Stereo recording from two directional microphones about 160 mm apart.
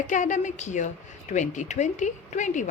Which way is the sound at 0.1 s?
50° left (ahead or behind).